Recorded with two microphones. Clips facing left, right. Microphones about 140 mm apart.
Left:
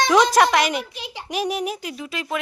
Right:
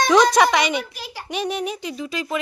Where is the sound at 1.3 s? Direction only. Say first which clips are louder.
Left 1 dB; 5° left (ahead or behind).